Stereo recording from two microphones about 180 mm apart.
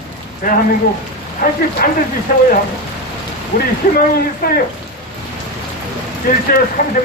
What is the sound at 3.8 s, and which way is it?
Speech, 55° left (ahead or behind).